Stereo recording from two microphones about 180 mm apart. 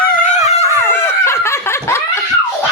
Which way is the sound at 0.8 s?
15° left (ahead or behind).